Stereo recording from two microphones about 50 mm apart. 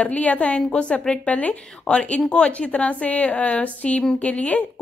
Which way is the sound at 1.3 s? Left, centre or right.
Left.